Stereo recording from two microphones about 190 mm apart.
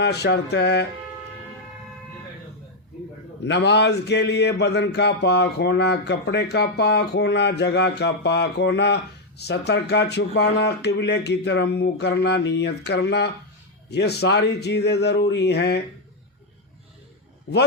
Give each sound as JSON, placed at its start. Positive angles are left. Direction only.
{"t": 0.0, "sound": "a man's voice", "side_deg": 60}
{"t": 3.4, "sound": "a man's voice", "side_deg": 65}